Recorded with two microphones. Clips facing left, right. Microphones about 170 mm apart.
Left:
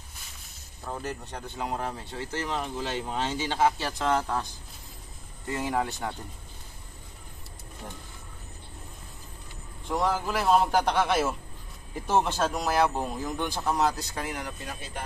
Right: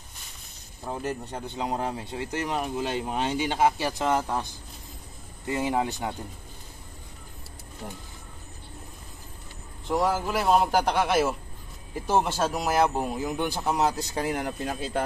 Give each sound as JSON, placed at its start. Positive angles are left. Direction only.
{"t": 0.8, "sound": "speech", "side_deg": -20}
{"t": 5.5, "sound": "speech", "side_deg": -20}
{"t": 9.8, "sound": "a man's voice", "side_deg": -5}
{"t": 14.3, "sound": "speech", "side_deg": -50}